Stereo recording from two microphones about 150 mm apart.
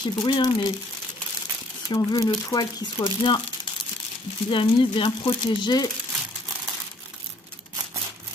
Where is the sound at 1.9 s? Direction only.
25° left (ahead or behind).